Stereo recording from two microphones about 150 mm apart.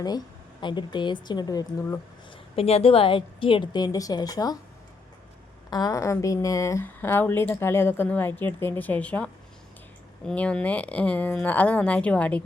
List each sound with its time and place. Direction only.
0.6 s a woman's voice: 30° left (ahead or behind)
2.6 s a woman's voice: 40° left (ahead or behind); by 4.5 s 25° left (ahead or behind)
5.7 s a woman's voice: 25° left (ahead or behind)